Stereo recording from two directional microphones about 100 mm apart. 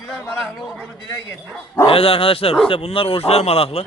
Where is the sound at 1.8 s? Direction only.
70° left (ahead or behind).